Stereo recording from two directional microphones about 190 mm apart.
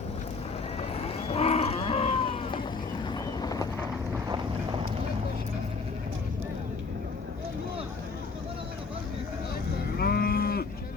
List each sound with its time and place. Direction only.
0.9 s cattle: 30° left (ahead or behind)
3.1 s vehicle: 20° left (ahead or behind)
10.0 s cattle: 55° left (ahead or behind)